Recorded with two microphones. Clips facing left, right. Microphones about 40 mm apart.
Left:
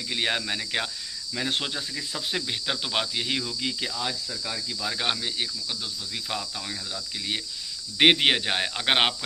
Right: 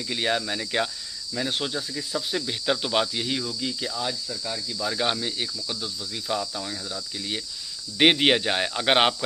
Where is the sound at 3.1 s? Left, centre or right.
Left.